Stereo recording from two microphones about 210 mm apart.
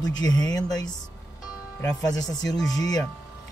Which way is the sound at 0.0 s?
20° left (ahead or behind).